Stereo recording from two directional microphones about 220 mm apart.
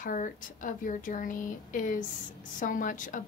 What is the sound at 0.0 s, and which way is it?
A woman's voice, 35° left (ahead or behind).